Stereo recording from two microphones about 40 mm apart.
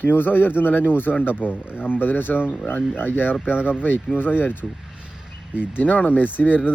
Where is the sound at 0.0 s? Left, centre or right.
Left.